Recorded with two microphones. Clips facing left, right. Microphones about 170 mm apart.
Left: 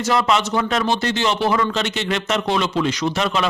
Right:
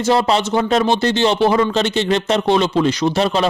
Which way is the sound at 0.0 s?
30° right (ahead or behind).